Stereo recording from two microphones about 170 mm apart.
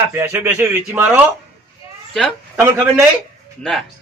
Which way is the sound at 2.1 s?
Centre (ahead or behind).